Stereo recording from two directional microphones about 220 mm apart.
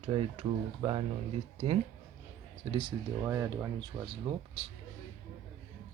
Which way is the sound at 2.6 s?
25° right (ahead or behind).